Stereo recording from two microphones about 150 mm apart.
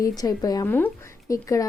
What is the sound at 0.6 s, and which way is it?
Speech, 15° left (ahead or behind).